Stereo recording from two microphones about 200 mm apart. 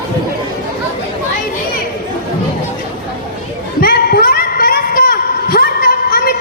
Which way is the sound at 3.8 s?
45° left (ahead or behind).